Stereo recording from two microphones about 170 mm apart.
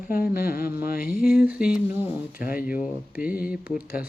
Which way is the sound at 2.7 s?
5° right (ahead or behind).